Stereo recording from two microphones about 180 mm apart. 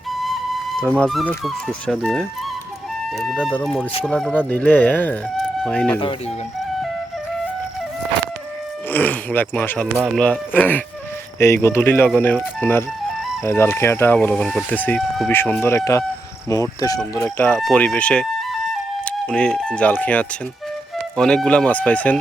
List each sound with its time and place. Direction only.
0.8 s speech: 5° left (ahead or behind)
8.9 s speech: 10° left (ahead or behind)